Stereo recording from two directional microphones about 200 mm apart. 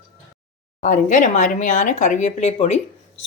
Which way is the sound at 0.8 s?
40° left (ahead or behind).